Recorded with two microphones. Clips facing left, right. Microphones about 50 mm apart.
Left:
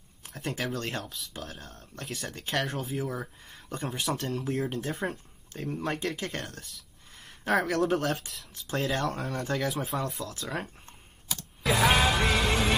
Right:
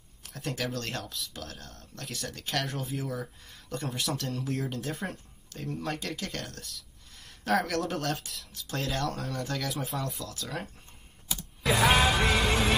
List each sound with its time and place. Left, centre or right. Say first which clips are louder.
0.2 s a sound: left 1 dB; left
0.7 s speech: left 1 dB; centre
2.6 s speech: left 2 dB; centre
3.1 s speech: even; centre
4.3 s speech: left 2 dB; centre; by 6.4 s left
6.4 s speech: left 1 dB; centre
7.2 s a sound: left 1 dB; left
7.6 s speech: left 4 dB; centre
9.3 s speech: left 3 dB; left
9.6 s speech: left 3 dB; centre
9.9 s speech: left 2 dB; left
11.2 s computer keyboard: even; centre